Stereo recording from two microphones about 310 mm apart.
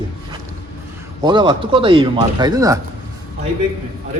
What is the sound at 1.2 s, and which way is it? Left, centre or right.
A man's voice, centre.